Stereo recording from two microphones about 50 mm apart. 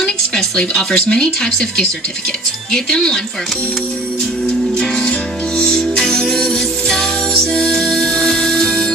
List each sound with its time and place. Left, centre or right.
0.0 s music: centre
0.6 s speech: centre
4.7 s music: centre